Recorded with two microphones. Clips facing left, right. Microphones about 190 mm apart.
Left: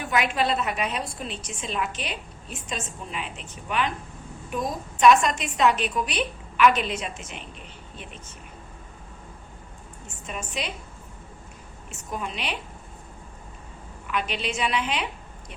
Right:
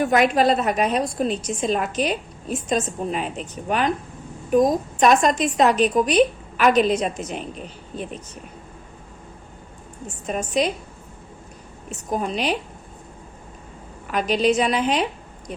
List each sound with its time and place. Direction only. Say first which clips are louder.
0.0 s a woman's voice: right 8 dB; 40° right (ahead or behind)
10.2 s a woman's voice: right 11 dB; 40° right (ahead or behind)
11.9 s a woman's voice: right 8 dB; 35° right (ahead or behind)
14.1 s a woman's voice: right 10 dB; 40° right (ahead or behind)